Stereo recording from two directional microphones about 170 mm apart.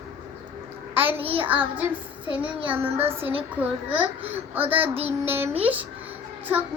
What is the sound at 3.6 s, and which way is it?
A child's voice, 10° right (ahead or behind).